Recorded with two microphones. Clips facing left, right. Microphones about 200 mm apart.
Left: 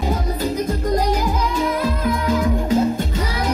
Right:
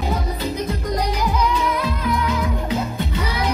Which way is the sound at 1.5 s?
45° left (ahead or behind).